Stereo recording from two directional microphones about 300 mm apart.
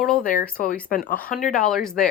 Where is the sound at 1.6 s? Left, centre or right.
Centre.